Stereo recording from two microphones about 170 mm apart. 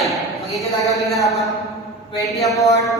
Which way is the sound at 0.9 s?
Centre (ahead or behind).